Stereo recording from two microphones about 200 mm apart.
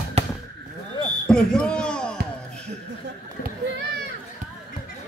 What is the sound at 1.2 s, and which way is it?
Basketball bounce, 5° left (ahead or behind).